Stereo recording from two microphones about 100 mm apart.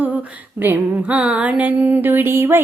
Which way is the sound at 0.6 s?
15° right (ahead or behind).